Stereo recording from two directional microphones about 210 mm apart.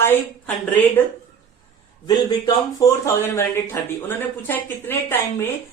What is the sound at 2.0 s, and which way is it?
A woman's voice, 20° left (ahead or behind).